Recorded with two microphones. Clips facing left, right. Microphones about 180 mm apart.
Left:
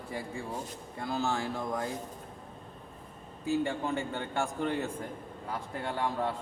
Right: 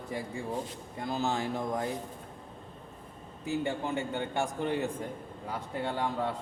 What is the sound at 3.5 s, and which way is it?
Speech, 20° right (ahead or behind).